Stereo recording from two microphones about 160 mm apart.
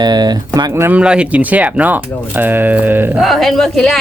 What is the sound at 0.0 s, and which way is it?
Speech, 25° right (ahead or behind).